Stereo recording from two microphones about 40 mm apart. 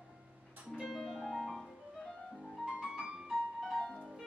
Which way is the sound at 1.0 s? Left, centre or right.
Centre.